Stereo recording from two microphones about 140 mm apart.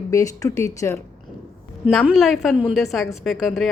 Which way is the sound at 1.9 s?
Centre (ahead or behind).